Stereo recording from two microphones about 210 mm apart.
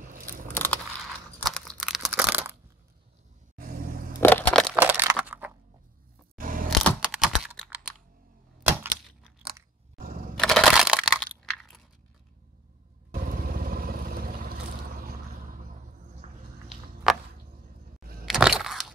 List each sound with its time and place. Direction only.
0.0 s biting: 40° right (ahead or behind)
1.4 s crunch: 5° left (ahead or behind)
3.5 s vehicle: 40° right (ahead or behind)
4.2 s crushing: 10° left (ahead or behind)
4.7 s a sound: 10° right (ahead or behind)
6.3 s camera: 40° right (ahead or behind)
6.7 s computer keyboard: centre (ahead or behind)
8.7 s typewriter: 10° right (ahead or behind)
9.9 s camera: 40° right (ahead or behind)
10.4 s computer keyboard: centre (ahead or behind)
11.4 s a sound: centre (ahead or behind)
13.1 s vehicle: 45° right (ahead or behind)
16.6 s a sound: 5° right (ahead or behind)
18.2 s crack: centre (ahead or behind)